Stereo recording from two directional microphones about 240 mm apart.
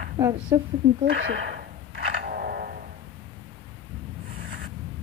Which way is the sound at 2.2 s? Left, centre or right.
Right.